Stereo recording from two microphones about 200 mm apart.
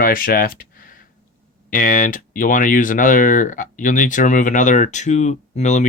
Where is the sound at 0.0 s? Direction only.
45° left (ahead or behind).